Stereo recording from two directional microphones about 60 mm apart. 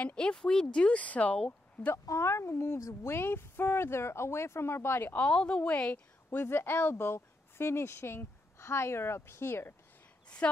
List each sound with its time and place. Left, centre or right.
0.0 s speech: centre
2.0 s speech: left
5.1 s speech: centre
6.4 s speech: left
10.4 s speech: centre